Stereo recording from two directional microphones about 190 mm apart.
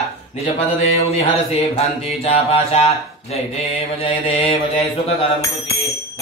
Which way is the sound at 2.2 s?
30° left (ahead or behind).